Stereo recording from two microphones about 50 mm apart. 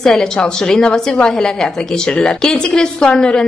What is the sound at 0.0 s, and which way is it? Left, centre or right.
A woman's voice, centre.